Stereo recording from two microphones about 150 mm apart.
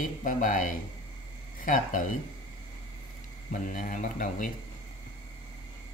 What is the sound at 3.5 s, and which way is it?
Speech, 60° left (ahead or behind).